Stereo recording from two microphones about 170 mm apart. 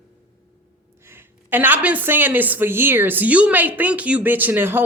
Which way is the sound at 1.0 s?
15° right (ahead or behind).